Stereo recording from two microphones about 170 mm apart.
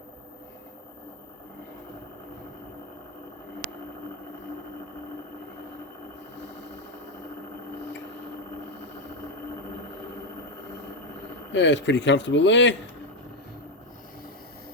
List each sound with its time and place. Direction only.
11.5 s a man's voice: 90° left